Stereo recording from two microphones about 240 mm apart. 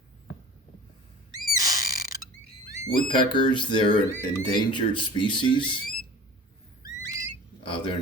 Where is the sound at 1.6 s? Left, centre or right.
Centre.